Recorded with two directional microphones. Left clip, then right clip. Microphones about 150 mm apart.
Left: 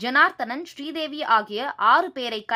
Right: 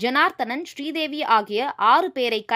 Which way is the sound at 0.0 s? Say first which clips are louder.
Left 1 dB; 40° right (ahead or behind).